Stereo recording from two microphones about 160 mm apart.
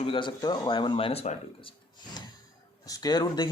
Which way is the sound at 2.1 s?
25° left (ahead or behind).